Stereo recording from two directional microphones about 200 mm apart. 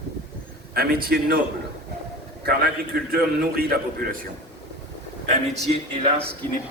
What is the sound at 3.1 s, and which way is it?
A man's voice, 50° right (ahead or behind).